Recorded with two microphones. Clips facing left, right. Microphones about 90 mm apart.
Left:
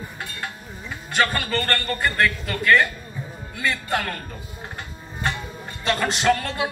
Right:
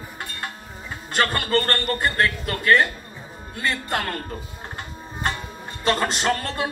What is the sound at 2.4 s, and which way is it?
A man's voice, 40° right (ahead or behind).